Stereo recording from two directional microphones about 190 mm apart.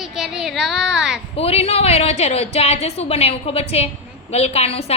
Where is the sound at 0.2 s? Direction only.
Centre (ahead or behind).